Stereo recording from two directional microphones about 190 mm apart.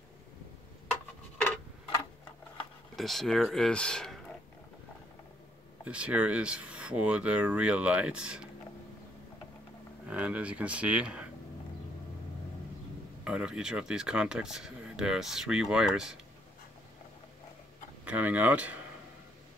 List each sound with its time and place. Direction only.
3.0 s speech: centre (ahead or behind)
5.9 s speech: 5° right (ahead or behind)
10.0 s speech: 5° right (ahead or behind)
13.2 s speech: 5° right (ahead or behind)
18.0 s speech: 10° right (ahead or behind)